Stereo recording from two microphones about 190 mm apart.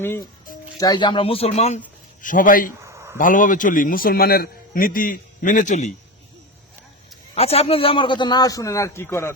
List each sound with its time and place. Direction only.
0.0 s speech: 10° left (ahead or behind)
0.8 s a man's voice: 20° left (ahead or behind); by 2.7 s 45° left (ahead or behind)
2.8 s a sound: 15° right (ahead or behind)
3.2 s a man's voice: 45° left (ahead or behind)
7.3 s a man's voice: 30° left (ahead or behind); by 9.3 s 15° left (ahead or behind)